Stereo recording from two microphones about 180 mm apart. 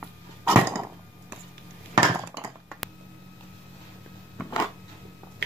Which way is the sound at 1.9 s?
30° right (ahead or behind).